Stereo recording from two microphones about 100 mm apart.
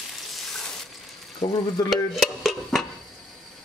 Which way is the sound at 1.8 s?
40° left (ahead or behind).